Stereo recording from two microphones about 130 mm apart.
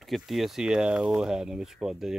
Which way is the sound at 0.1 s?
Centre (ahead or behind).